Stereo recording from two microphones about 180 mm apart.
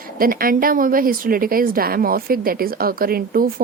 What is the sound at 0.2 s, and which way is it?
A woman's voice, 55° right (ahead or behind).